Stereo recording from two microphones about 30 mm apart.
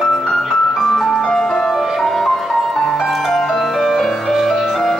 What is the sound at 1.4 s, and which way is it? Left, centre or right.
Music, left.